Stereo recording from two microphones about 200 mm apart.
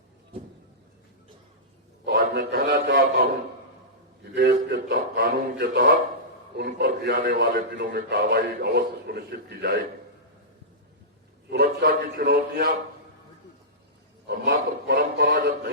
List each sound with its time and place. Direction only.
2.0 s a man's voice: 50° right (ahead or behind)
11.5 s a man's voice: 60° right (ahead or behind)
14.3 s a man's voice: 60° right (ahead or behind)